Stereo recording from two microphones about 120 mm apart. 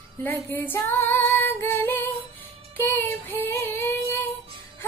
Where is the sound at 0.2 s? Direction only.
15° left (ahead or behind).